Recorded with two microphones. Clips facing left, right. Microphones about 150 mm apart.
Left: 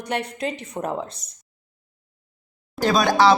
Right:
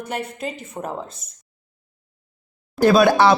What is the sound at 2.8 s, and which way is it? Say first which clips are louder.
Speech: right 6 dB; 10° right (ahead or behind).